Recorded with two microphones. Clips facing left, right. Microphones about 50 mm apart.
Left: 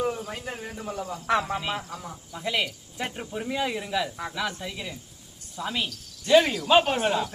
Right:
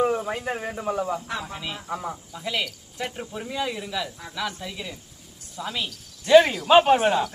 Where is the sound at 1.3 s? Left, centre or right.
Left.